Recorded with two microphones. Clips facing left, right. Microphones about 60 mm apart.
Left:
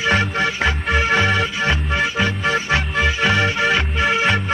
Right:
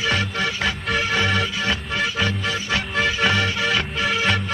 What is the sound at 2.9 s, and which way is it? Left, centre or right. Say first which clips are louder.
Music: left 1 dB; centre.